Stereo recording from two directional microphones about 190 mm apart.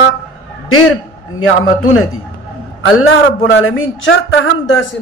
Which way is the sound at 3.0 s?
90° left.